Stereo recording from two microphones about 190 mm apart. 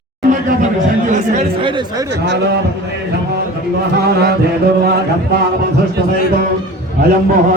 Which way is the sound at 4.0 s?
60° right (ahead or behind).